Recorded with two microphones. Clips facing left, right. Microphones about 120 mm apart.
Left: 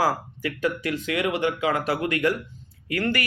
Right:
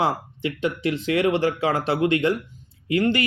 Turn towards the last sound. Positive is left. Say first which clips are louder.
# right 5 dB
turn(degrees=-20)  # may be behind; listen again after turning